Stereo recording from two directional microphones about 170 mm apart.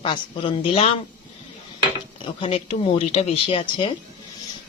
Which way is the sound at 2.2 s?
30° left (ahead or behind).